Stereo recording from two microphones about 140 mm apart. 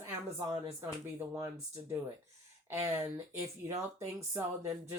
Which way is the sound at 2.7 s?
20° right (ahead or behind).